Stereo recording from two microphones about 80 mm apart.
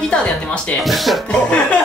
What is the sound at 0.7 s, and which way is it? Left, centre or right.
Speech, centre.